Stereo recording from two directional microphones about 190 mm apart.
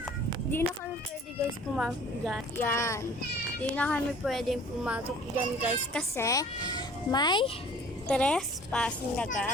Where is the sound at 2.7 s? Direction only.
15° left (ahead or behind); by 5.1 s 5° right (ahead or behind).